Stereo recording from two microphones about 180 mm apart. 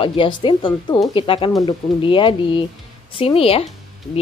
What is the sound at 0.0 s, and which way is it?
A woman's voice, 30° left (ahead or behind).